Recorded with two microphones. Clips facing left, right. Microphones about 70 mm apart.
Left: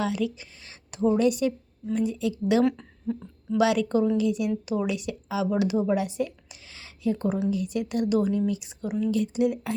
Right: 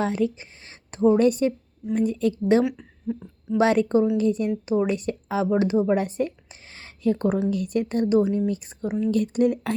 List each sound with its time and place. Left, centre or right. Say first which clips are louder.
0.0 s a woman's voice: right 3 dB; right
2.6 s a woman's voice: left 2 dB; centre
3.6 s a woman's voice: right 3 dB; right
5.9 s a woman's voice: right 3 dB; right
8.4 s a woman's voice: right 2 dB; right
9.1 s speech: right 5 dB; right